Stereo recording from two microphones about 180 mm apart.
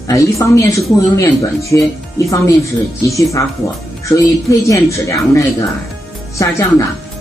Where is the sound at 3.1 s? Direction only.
15° left (ahead or behind).